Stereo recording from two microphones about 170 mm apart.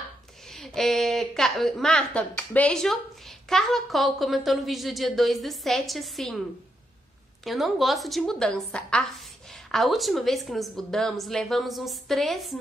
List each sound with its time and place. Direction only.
0.5 s speech: centre (ahead or behind)
7.4 s speech: centre (ahead or behind)